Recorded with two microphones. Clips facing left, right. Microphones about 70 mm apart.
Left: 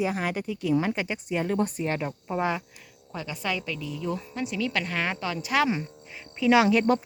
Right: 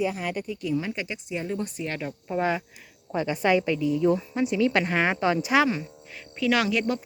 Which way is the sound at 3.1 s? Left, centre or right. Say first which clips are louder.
Right 9 dB; right.